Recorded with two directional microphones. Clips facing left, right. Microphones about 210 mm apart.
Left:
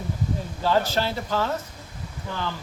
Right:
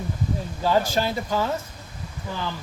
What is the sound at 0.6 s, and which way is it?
Speech, 10° right (ahead or behind).